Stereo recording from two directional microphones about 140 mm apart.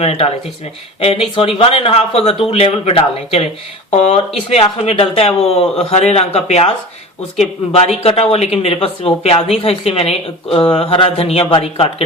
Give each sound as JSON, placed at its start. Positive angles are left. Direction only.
{"t": 0.0, "sound": "speech", "side_deg": 45}
{"t": 4.5, "sound": "speech", "side_deg": 45}